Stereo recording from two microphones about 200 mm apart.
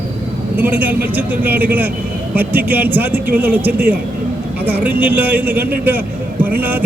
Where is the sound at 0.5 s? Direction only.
10° right (ahead or behind).